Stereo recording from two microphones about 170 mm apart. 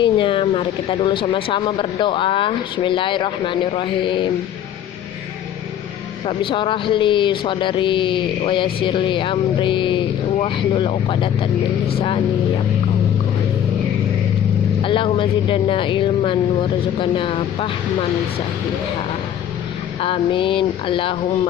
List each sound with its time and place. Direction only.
0.0 s speech: 30° left (ahead or behind)
6.2 s speech: 30° left (ahead or behind)
14.8 s speech: 30° left (ahead or behind)
20.0 s speech: 30° left (ahead or behind)